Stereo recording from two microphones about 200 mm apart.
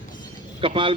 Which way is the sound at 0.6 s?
25° right (ahead or behind).